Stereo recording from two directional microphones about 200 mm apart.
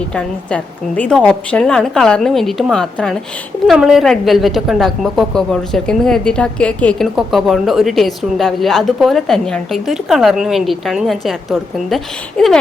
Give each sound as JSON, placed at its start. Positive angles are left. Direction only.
{"t": 0.1, "sound": "a woman's voice", "side_deg": 5}